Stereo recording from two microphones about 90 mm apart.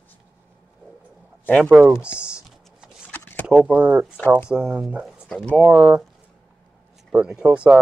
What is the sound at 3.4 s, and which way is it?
Speech, 15° right (ahead or behind).